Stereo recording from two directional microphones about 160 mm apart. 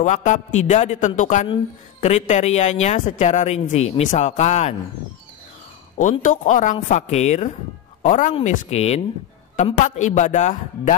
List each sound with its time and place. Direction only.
0.0 s a woman's voice: 50° left (ahead or behind)
6.2 s a woman's voice: 55° left (ahead or behind)
8.3 s a woman's voice: 40° left (ahead or behind)